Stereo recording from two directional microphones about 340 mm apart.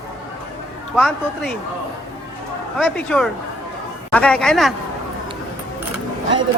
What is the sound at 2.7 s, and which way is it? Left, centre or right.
Speech, centre.